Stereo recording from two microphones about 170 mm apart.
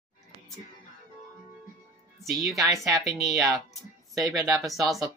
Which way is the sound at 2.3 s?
Centre (ahead or behind).